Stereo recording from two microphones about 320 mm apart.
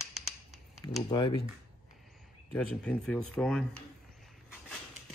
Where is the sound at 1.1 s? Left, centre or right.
Centre.